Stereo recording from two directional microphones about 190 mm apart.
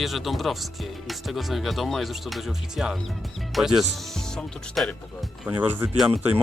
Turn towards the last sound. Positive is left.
turn(degrees=-5)  # may be behind; listen again after turning